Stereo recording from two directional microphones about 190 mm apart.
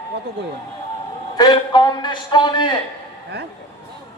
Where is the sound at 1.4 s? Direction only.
25° left (ahead or behind).